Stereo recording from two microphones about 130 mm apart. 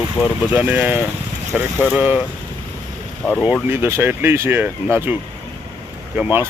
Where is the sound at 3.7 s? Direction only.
20° right (ahead or behind).